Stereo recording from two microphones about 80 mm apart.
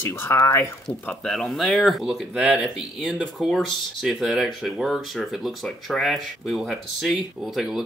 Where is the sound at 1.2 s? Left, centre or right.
Centre.